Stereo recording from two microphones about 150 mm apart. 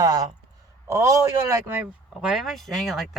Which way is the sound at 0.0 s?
25° right (ahead or behind).